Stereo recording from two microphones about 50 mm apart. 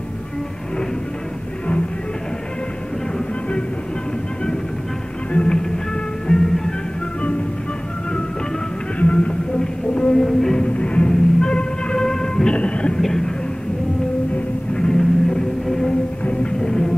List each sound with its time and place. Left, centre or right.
5.3 s music: left
6.2 s music: centre
7.2 s music: left
9.0 s music: left
10.7 s music: left
12.5 s a sound: left
13.0 s a sound: centre
14.3 s music: centre